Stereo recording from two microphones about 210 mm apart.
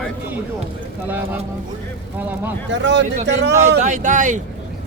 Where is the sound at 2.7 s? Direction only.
60° right (ahead or behind).